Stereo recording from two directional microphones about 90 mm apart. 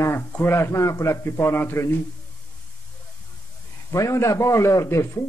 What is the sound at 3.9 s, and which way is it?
Speech, 35° left (ahead or behind).